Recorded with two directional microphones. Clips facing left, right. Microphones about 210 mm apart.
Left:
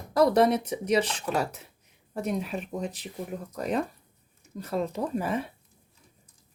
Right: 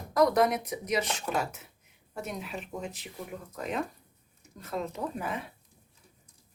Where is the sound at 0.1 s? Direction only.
30° left (ahead or behind).